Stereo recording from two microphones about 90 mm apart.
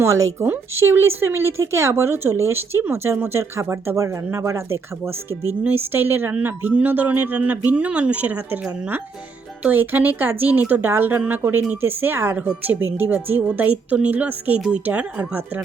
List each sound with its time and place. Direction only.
0.0 s speech: 35° right (ahead or behind); by 8.5 s 20° right (ahead or behind)
9.6 s a woman's voice: 20° right (ahead or behind)